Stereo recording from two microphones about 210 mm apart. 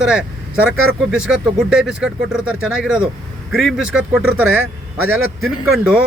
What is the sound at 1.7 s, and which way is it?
Speech, 5° right (ahead or behind).